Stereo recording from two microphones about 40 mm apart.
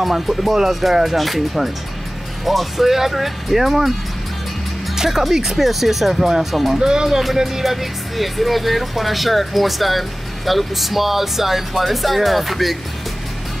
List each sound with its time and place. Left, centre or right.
0.0 s speech: centre
4.9 s speech: centre
6.8 s speech: centre